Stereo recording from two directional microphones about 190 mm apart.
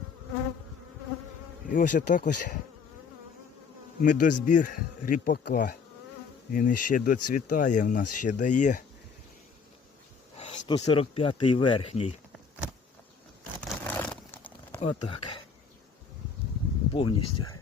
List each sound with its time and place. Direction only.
1.6 s speech: 45° left (ahead or behind)
4.0 s speech: 45° left (ahead or behind)
10.7 s speech: 25° left (ahead or behind)
13.6 s a sound: 5° left (ahead or behind)
14.8 s speech: 25° left (ahead or behind)
16.9 s speech: 25° left (ahead or behind)